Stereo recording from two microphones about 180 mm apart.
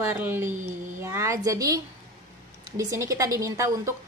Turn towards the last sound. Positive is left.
turn(degrees=-20)  # may be behind; listen again after turning